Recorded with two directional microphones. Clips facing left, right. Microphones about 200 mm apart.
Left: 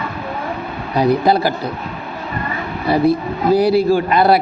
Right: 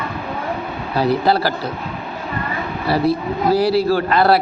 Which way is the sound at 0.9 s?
15° left (ahead or behind).